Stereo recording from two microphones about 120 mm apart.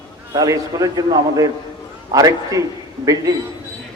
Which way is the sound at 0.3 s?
30° right (ahead or behind).